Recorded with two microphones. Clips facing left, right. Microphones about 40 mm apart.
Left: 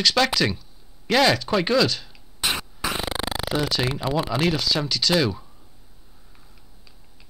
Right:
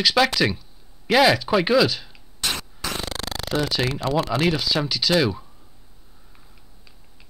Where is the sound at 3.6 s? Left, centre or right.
Centre.